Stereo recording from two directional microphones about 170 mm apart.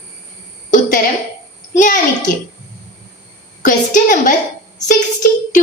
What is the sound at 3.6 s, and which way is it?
Speech, 45° left (ahead or behind).